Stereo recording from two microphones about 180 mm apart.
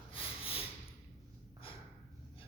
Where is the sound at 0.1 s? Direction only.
30° left (ahead or behind).